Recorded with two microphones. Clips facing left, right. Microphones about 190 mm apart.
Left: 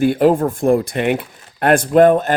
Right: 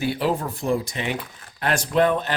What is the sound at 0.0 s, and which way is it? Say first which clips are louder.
A man's voice: left 10 dB; 50° left (ahead or behind).